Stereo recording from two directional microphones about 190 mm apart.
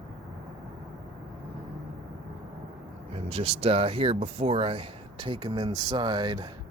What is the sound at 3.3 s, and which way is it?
Speech, 30° right (ahead or behind).